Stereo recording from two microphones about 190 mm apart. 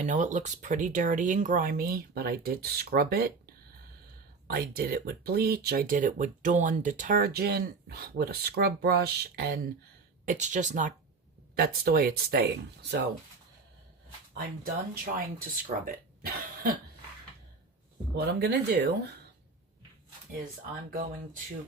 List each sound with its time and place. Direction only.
0.0 s speech: 40° right (ahead or behind); by 9.6 s 55° right (ahead or behind)
10.2 s speech: 40° right (ahead or behind)
11.5 s speech: 55° right (ahead or behind)
14.3 s speech: 50° right (ahead or behind)
16.2 s cough: 50° right (ahead or behind)
18.2 s speech: 60° right (ahead or behind)